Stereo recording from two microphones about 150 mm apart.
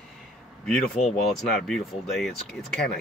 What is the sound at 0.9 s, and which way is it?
Speech, 45° left (ahead or behind).